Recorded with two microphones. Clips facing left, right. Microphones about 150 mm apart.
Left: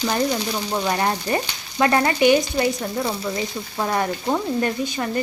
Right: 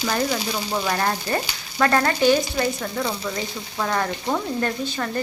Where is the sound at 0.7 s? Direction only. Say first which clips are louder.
Left 1 dB; 15° left (ahead or behind).